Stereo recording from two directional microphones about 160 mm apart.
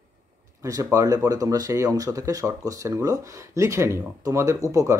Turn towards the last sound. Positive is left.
turn(degrees=-20)  # may be behind; listen again after turning